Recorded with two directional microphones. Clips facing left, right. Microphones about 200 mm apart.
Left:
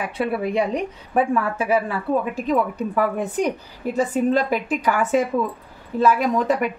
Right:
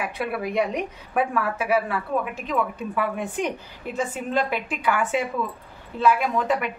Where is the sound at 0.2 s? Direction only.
30° left (ahead or behind).